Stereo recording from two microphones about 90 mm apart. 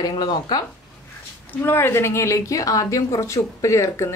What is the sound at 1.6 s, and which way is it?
A woman's voice, 25° left (ahead or behind).